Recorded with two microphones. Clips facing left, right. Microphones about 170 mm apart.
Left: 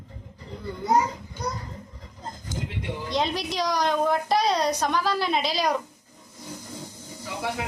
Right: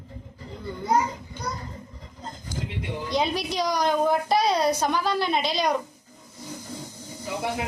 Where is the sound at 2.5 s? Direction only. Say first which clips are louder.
Even; 20° left (ahead or behind).